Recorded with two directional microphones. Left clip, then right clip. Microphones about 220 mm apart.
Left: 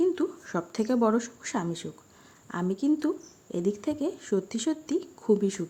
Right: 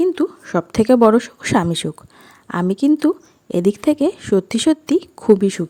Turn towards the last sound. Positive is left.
turn(degrees=-35)  # may be behind; listen again after turning